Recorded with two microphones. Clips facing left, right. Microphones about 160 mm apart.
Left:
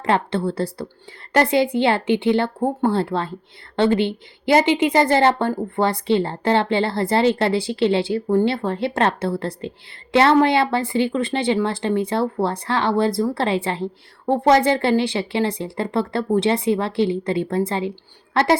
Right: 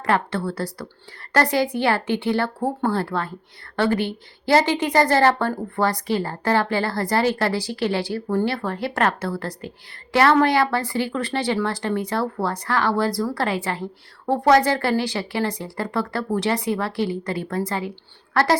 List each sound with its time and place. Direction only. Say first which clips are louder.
0.0 s a woman's voice: left 2 dB; 25° left (ahead or behind)